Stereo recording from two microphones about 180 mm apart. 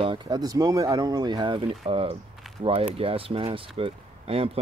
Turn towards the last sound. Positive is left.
turn(degrees=-30)  # may be behind; listen again after turning